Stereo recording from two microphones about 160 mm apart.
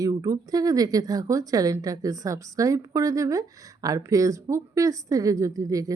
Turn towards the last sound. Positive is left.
turn(degrees=-20)  # may be behind; listen again after turning